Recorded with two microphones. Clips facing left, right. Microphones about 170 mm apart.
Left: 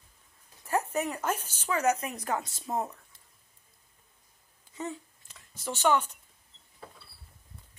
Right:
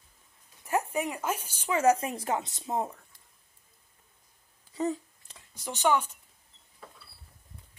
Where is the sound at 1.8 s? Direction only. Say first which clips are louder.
Right 4 dB; 30° right (ahead or behind).